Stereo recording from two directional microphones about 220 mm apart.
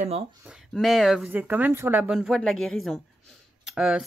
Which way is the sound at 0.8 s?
Centre (ahead or behind).